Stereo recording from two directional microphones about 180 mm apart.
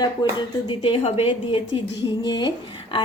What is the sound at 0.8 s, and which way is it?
A woman's voice, 35° left (ahead or behind).